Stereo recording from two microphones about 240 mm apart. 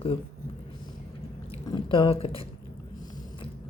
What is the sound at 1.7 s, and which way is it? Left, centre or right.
Speech, left.